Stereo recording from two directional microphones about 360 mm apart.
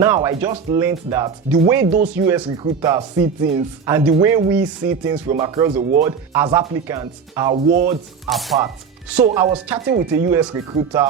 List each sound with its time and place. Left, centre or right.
0.0 s speech: centre
8.3 s chopping: centre
9.1 s speech: centre
9.6 s chopping: centre
10.1 s speech: centre